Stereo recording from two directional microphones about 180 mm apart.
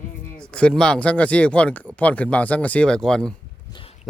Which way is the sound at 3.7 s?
30° left (ahead or behind).